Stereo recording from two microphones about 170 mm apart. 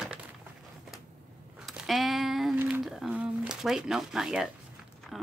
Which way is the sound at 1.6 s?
Centre (ahead or behind).